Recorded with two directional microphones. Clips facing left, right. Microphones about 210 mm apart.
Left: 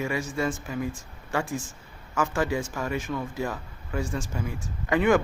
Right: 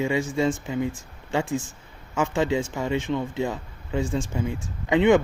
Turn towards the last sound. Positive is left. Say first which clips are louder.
# right 4 dB
turn(degrees=-20)  # may be behind; listen again after turning